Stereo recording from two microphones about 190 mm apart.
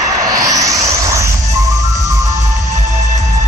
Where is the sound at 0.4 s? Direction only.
15° right (ahead or behind).